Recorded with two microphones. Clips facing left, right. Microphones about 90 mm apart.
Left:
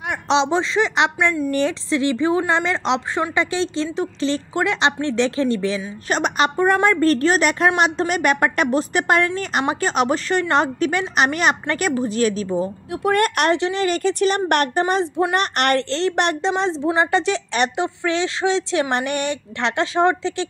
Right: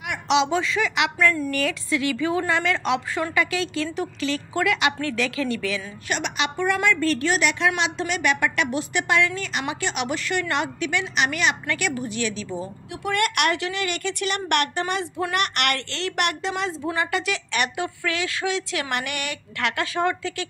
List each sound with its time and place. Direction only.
0.1 s a woman's voice: 30° left (ahead or behind)